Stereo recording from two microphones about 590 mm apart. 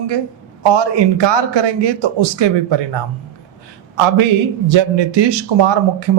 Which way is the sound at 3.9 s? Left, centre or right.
Right.